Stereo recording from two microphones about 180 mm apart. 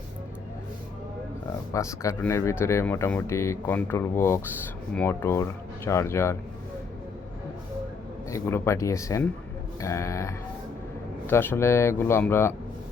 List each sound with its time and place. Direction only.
1.7 s speech: 15° left (ahead or behind)
8.3 s speech: 15° left (ahead or behind)